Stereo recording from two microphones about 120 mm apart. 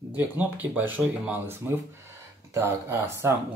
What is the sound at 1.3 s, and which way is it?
Speech, 20° right (ahead or behind).